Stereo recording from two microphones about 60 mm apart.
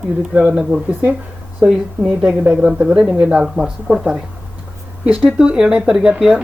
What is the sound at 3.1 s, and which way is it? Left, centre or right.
Speech, right.